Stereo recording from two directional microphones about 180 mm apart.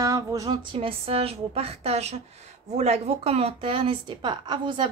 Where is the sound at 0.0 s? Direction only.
20° right (ahead or behind).